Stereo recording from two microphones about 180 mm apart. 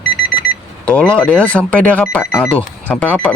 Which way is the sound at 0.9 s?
5° left (ahead or behind).